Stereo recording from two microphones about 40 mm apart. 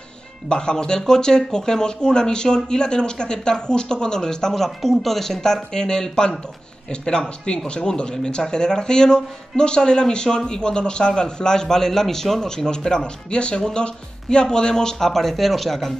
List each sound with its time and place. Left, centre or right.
0.5 s speech: centre